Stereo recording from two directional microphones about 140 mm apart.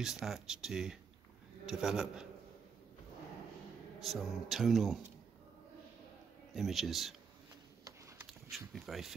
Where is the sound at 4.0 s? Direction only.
Centre (ahead or behind).